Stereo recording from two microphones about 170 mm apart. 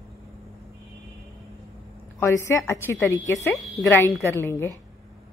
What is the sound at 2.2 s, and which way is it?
A woman's voice, 15° left (ahead or behind).